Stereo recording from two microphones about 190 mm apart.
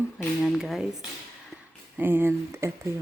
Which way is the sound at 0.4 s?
Centre (ahead or behind).